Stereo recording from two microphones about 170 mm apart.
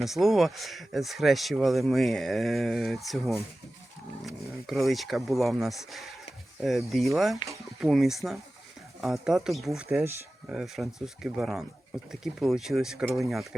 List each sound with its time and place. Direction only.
0.0 s speech: centre (ahead or behind)
7.4 s speech: 25° left (ahead or behind)
7.8 s speech: centre (ahead or behind)